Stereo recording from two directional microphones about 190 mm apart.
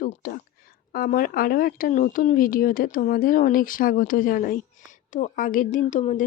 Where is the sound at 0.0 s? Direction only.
45° left (ahead or behind).